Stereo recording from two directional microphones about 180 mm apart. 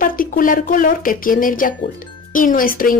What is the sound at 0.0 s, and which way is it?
A woman's voice, 50° left (ahead or behind).